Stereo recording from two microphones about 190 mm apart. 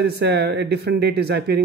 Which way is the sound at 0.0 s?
60° right (ahead or behind).